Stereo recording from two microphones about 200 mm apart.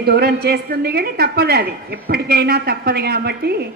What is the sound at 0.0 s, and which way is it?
A woman's voice, 50° right (ahead or behind).